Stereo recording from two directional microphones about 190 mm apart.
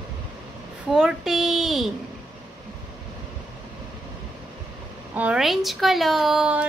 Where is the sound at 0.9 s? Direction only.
5° right (ahead or behind).